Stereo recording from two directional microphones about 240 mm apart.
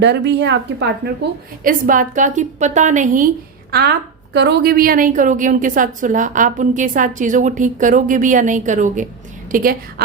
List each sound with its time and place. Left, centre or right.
0.0 s a woman's voice: right
1.6 s a woman's voice: right
3.7 s a woman's voice: right